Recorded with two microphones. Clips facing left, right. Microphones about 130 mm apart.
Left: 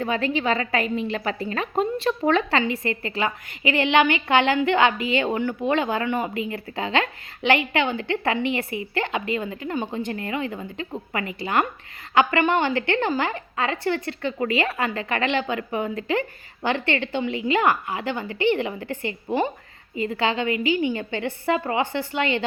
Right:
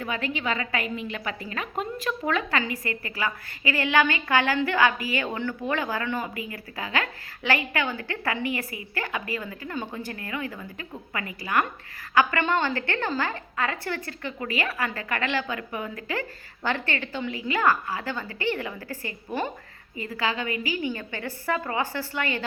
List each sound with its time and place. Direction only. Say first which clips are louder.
0.0 s speech: left 6 dB; 30° left (ahead or behind)